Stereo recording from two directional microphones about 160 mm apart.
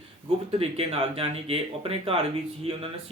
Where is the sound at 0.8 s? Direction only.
35° right (ahead or behind).